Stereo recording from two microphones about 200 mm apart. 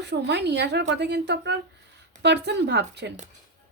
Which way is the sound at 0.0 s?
60° right (ahead or behind).